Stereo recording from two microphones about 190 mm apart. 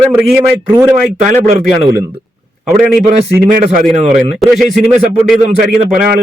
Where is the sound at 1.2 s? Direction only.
40° right (ahead or behind).